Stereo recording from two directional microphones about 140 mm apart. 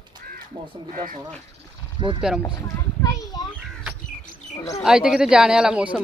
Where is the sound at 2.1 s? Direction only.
5° right (ahead or behind).